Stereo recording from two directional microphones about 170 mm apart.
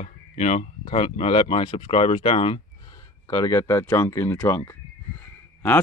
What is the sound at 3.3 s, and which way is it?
Speech, 20° left (ahead or behind).